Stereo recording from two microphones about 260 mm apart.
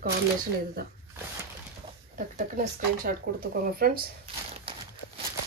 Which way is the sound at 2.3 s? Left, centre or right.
Right.